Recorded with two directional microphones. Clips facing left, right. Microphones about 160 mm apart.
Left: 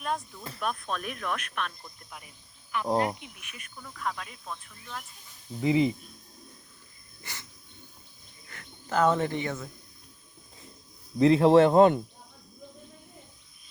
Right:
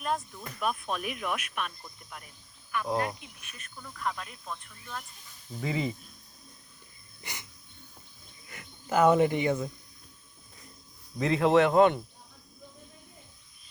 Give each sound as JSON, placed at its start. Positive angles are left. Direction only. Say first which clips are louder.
{"t": 0.0, "sound": "speech", "louder": "right 1 dB", "side_deg": 0}
{"t": 3.0, "sound": "speech", "louder": "left 4 dB", "side_deg": 20}
{"t": 3.8, "sound": "speech", "louder": "even", "side_deg": 0}
{"t": 5.6, "sound": "speech", "louder": "left 7 dB", "side_deg": 20}
{"t": 7.2, "sound": "dog", "louder": "right 1 dB", "side_deg": -15}
{"t": 8.4, "sound": "speech", "louder": "right 2 dB", "side_deg": -10}
{"t": 11.2, "sound": "speech", "louder": "left 5 dB", "side_deg": 30}